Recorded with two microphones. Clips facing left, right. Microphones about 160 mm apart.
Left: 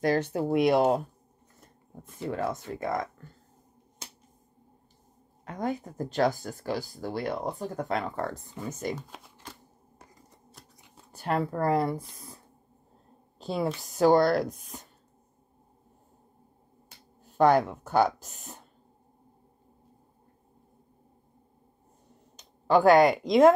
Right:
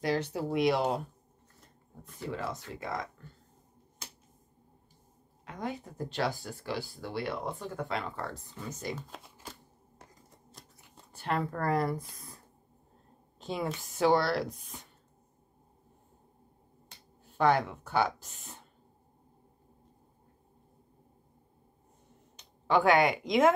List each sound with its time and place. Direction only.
0.0 s speech: 50° left (ahead or behind)
2.2 s speech: 50° left (ahead or behind)
5.4 s speech: 45° left (ahead or behind)
9.9 s scissors: centre (ahead or behind)
11.1 s a sound: 40° left (ahead or behind)
11.5 s speech: 25° left (ahead or behind)
13.4 s a sound: 35° left (ahead or behind)
13.7 s speech: 40° left (ahead or behind)
17.4 s speech: 45° left (ahead or behind)
22.4 s speech: 40° left (ahead or behind)